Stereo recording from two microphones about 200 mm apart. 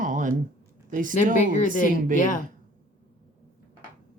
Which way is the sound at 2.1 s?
40° left (ahead or behind).